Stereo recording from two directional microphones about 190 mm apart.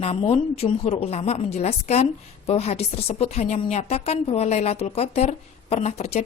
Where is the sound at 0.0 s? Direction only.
30° left (ahead or behind).